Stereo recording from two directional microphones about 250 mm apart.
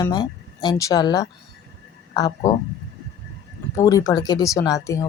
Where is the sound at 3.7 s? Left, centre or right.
Centre.